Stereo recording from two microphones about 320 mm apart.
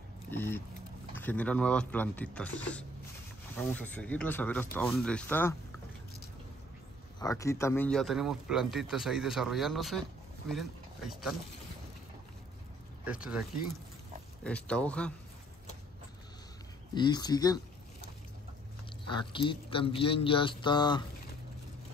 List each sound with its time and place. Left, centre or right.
0.3 s a sound: centre
1.1 s speech: centre
7.2 s speech: centre
13.0 s speech: centre
16.9 s speech: centre
19.1 s speech: centre